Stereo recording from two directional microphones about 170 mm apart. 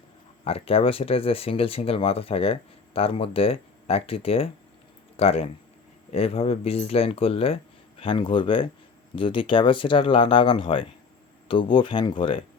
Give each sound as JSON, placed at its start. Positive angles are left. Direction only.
{"t": 0.4, "sound": "speech", "side_deg": 35}